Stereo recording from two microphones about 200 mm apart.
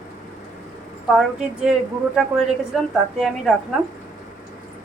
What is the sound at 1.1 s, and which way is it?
A woman's voice, 5° right (ahead or behind).